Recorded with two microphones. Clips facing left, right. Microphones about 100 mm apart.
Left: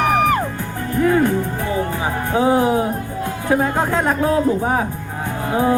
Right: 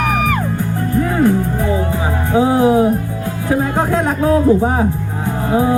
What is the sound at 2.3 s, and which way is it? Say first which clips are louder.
Music: right 4 dB; 15° right (ahead or behind).